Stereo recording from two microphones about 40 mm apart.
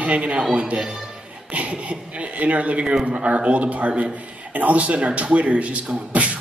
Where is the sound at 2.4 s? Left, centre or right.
Right.